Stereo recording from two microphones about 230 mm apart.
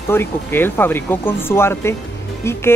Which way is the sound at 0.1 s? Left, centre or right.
Centre.